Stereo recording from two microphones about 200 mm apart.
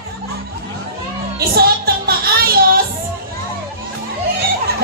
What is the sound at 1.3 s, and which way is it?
Music, 50° right (ahead or behind).